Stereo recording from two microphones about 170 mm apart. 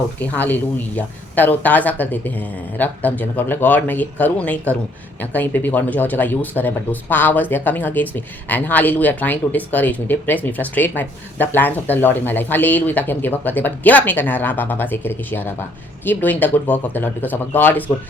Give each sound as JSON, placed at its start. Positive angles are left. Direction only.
{"t": 0.2, "sound": "speech", "side_deg": 10}